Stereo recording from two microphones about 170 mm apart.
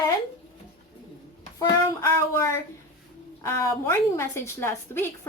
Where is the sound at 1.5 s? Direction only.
20° left (ahead or behind).